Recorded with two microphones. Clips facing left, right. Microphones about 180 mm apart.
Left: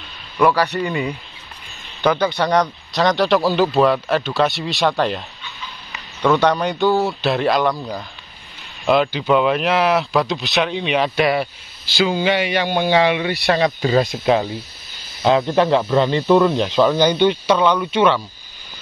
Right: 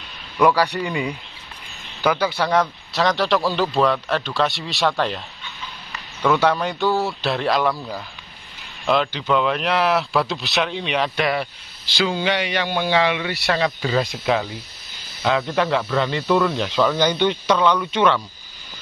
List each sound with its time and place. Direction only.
0.4 s a man's voice: 15° right (ahead or behind)
8.8 s a man's voice: 5° left (ahead or behind)
13.7 s speech: 35° left (ahead or behind)
16.9 s a man's voice: 10° left (ahead or behind)